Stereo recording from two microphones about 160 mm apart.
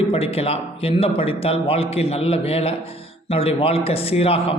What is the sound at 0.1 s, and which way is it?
A man's voice, 35° left (ahead or behind).